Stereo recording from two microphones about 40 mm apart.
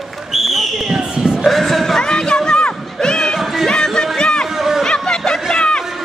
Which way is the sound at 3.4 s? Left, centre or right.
Centre.